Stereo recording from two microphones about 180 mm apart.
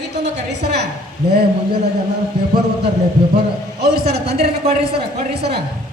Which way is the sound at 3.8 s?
65° right (ahead or behind).